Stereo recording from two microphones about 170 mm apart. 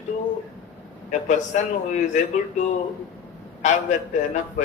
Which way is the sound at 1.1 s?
45° left (ahead or behind).